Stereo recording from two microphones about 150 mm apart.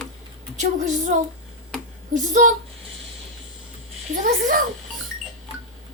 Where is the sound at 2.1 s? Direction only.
55° right (ahead or behind).